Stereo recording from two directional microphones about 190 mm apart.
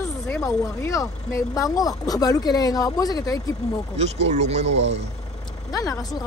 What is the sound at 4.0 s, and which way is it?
Speech, 35° right (ahead or behind).